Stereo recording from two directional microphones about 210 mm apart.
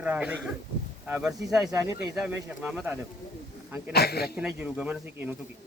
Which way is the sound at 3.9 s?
50° left (ahead or behind).